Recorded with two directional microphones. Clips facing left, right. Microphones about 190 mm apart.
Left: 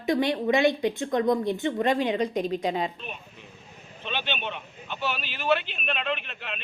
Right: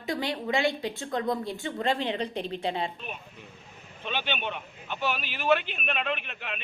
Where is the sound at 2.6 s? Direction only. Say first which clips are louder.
Left 3 dB; 30° right (ahead or behind).